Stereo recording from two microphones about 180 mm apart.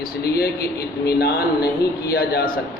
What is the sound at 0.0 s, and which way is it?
Speech, 60° left (ahead or behind).